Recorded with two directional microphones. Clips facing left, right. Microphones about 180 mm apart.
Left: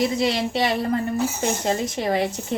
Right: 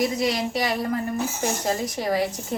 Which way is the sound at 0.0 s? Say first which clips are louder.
Left 2 dB; 30° left (ahead or behind).